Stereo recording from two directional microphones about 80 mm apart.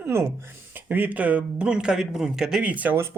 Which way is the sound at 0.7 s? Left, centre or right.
Right.